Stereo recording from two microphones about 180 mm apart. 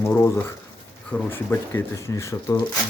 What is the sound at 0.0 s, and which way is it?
Speech, 15° left (ahead or behind).